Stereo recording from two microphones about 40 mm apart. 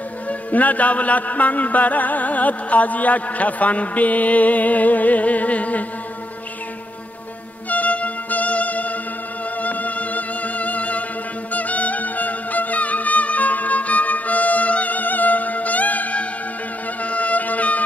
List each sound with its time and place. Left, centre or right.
0.3 s music: left
7.7 s music: left